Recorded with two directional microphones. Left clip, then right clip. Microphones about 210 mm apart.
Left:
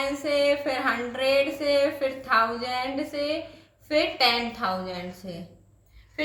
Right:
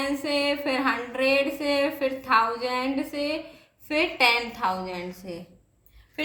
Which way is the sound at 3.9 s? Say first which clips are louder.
Right 1 dB; 40° right (ahead or behind).